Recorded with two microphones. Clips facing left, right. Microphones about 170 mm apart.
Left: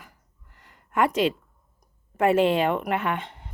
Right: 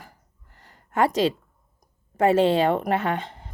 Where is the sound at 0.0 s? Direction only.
35° right (ahead or behind).